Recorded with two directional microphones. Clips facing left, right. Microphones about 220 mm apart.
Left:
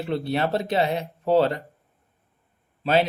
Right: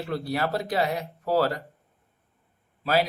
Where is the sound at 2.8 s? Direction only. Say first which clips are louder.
Left 3 dB; 25° left (ahead or behind).